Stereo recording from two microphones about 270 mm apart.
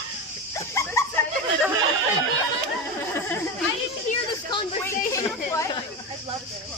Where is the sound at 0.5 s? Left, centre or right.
Centre.